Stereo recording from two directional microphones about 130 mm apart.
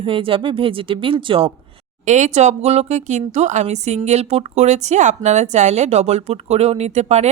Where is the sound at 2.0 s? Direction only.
70° right (ahead or behind).